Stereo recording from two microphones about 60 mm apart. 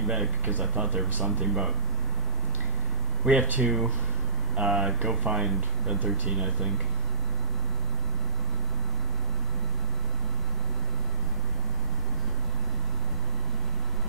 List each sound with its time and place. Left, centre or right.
0.0 s speech: centre
0.5 s speech: right
1.4 s speech: centre
3.3 s speech: right
4.6 s speech: centre